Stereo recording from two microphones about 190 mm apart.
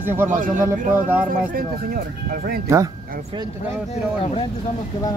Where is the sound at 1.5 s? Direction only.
50° right (ahead or behind).